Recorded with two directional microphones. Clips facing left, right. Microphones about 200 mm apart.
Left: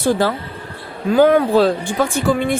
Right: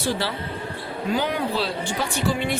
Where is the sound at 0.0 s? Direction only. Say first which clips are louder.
Left 9 dB; 50° left (ahead or behind).